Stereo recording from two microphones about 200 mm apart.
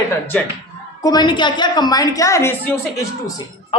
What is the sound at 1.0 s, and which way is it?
Speech, 20° left (ahead or behind).